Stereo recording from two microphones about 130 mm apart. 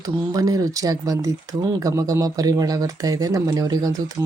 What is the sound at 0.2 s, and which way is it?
Speech, 30° right (ahead or behind).